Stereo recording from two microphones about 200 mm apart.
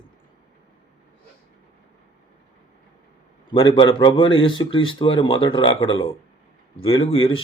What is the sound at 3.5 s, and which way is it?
Speech, 25° left (ahead or behind).